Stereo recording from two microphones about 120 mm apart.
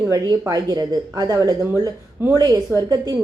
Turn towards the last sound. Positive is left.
turn(degrees=-30)  # may be behind; listen again after turning